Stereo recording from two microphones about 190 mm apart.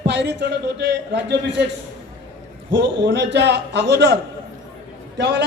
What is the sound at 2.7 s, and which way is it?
A man's voice, 65° right (ahead or behind).